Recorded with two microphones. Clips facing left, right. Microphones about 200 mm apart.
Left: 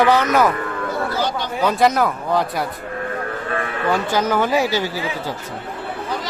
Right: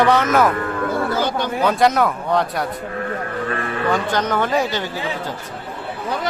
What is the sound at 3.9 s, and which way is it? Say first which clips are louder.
A man's voice: left 2 dB; 5° left (ahead or behind).